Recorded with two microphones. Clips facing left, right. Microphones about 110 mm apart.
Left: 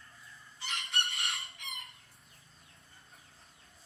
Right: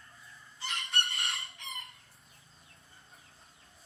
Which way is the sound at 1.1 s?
30° right (ahead or behind).